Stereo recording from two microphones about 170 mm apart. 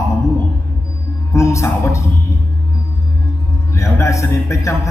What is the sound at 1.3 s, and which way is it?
Speech, 15° left (ahead or behind).